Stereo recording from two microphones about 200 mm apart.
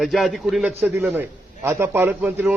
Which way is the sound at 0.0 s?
Centre (ahead or behind).